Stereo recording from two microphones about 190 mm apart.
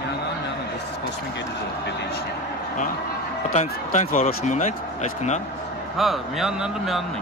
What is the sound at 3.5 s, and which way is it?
Speech, 40° left (ahead or behind).